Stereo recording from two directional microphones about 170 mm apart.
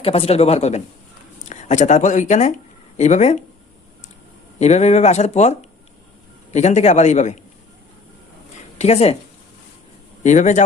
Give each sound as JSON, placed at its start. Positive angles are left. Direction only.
{"t": 0.0, "sound": "a man's voice", "side_deg": 35}
{"t": 4.6, "sound": "a man's voice", "side_deg": 40}
{"t": 8.8, "sound": "speech", "side_deg": 40}
{"t": 10.2, "sound": "a man's voice", "side_deg": 45}